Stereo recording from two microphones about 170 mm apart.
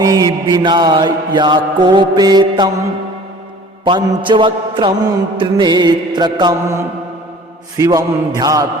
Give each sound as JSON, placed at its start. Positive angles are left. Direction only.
{"t": 0.0, "sound": "mantra", "side_deg": -20}